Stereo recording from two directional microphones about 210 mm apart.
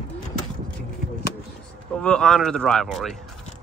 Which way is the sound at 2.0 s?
5° left (ahead or behind).